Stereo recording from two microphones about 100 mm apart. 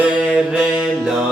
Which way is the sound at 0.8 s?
5° left (ahead or behind).